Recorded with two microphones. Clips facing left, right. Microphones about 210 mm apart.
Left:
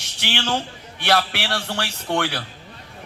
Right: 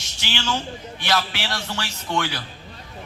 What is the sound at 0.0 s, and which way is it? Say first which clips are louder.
A man's voice: left 2 dB; 65° left (ahead or behind).